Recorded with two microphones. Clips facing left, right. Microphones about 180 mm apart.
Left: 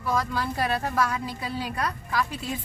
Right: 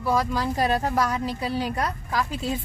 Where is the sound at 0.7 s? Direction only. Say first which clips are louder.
Right 3 dB; 40° right (ahead or behind).